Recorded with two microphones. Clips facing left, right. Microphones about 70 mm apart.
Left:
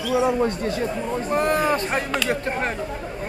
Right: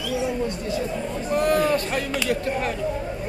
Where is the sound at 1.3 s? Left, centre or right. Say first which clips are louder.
Right 1 dB; left.